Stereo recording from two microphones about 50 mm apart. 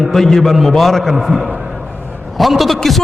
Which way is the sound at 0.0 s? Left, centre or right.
Centre.